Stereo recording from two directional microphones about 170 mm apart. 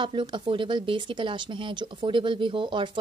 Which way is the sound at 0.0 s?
30° right (ahead or behind).